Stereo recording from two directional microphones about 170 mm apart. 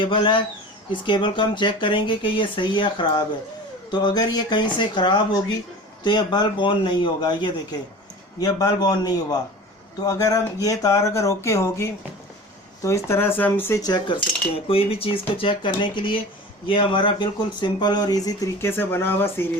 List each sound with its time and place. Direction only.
0.0 s speech: 30° left (ahead or behind); by 13.9 s 15° left (ahead or behind)
13.9 s cutlery: 30° left (ahead or behind)
15.4 s speech: 30° left (ahead or behind); by 19.5 s 15° left (ahead or behind)